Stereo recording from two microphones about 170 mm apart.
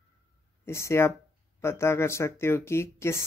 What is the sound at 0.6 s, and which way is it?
Speech, 15° left (ahead or behind).